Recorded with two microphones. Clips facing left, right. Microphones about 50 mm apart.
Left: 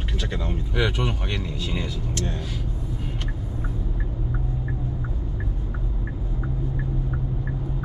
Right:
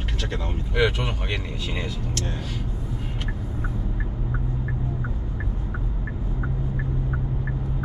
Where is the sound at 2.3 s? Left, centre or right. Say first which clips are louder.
Even; centre.